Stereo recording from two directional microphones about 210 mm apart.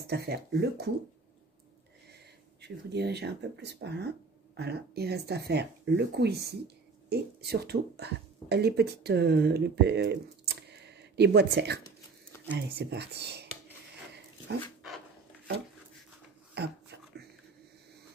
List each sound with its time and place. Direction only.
0.0 s speech: 50° right (ahead or behind)
2.6 s speech: 50° right (ahead or behind)
10.7 s a sound: 55° right (ahead or behind)
12.4 s speech: 55° right (ahead or behind)
16.5 s beatboxing: 50° right (ahead or behind)